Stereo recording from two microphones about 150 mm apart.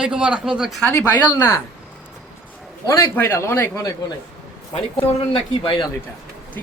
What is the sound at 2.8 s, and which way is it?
A man's voice, 20° left (ahead or behind).